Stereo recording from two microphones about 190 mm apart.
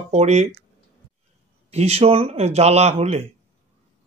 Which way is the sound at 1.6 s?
35° right (ahead or behind).